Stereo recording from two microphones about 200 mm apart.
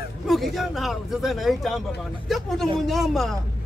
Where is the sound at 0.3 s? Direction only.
Centre (ahead or behind).